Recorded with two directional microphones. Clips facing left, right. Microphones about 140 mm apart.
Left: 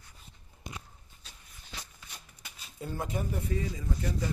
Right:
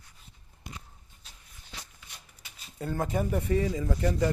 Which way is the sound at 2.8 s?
55° right (ahead or behind).